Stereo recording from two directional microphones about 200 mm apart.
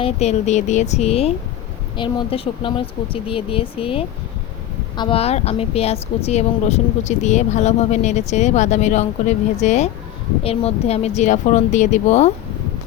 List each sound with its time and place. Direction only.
0.0 s a woman's voice: 35° left (ahead or behind)